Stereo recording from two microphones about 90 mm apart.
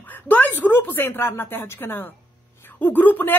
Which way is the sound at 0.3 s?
20° left (ahead or behind).